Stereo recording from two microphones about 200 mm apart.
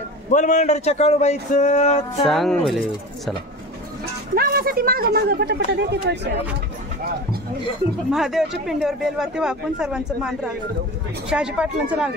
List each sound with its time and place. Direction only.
0.3 s speech: 40° left (ahead or behind)
2.2 s speech: centre (ahead or behind)
4.4 s speech: 50° right (ahead or behind)
8.1 s speech: centre (ahead or behind)